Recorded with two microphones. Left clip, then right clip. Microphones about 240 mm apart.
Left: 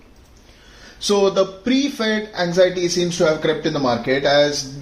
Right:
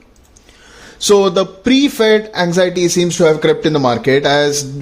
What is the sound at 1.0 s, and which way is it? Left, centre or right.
Speech, right.